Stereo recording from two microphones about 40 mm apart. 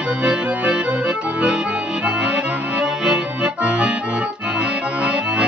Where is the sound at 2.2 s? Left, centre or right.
Right.